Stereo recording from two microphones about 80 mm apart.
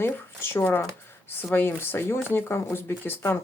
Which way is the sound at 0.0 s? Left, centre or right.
Left.